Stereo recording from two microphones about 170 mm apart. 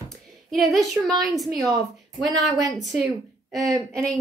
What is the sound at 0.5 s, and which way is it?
A woman's voice, centre (ahead or behind).